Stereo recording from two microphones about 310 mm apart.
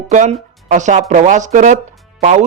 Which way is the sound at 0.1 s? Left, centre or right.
Right.